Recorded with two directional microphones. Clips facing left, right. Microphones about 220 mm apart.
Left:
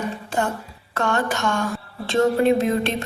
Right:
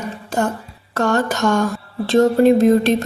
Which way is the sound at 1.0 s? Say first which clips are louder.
Right 5 dB; 40° right (ahead or behind).